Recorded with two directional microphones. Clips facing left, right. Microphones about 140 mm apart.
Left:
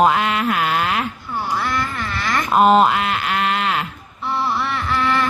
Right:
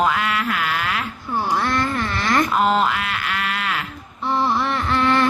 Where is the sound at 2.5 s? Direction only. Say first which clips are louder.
Left 5 dB; 20° left (ahead or behind).